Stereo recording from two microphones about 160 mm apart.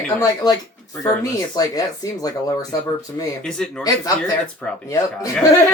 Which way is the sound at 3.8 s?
25° left (ahead or behind).